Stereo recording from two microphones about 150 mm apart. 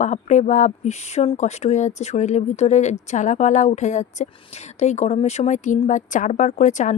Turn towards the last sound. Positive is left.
turn(degrees=55)  # may be behind; listen again after turning